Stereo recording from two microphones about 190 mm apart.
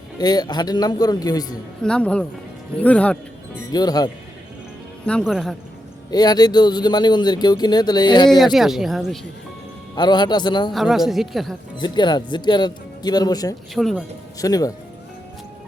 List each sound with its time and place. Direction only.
0.2 s speech: 20° left (ahead or behind)
1.8 s a woman's voice: 5° left (ahead or behind)
3.7 s speech: 20° left (ahead or behind)
5.0 s a woman's voice: 5° left (ahead or behind)
6.1 s speech: 20° left (ahead or behind)
8.5 s a woman's voice: centre (ahead or behind)
9.9 s speech: 25° left (ahead or behind)
10.7 s a woman's voice: centre (ahead or behind)
11.8 s speech: 25° left (ahead or behind)
13.7 s a woman's voice: centre (ahead or behind)
14.3 s speech: 20° left (ahead or behind)